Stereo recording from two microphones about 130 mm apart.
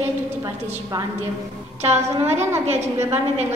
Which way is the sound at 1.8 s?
60° right (ahead or behind).